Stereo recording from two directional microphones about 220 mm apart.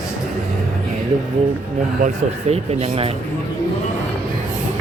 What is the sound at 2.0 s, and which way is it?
Speech, 30° right (ahead or behind).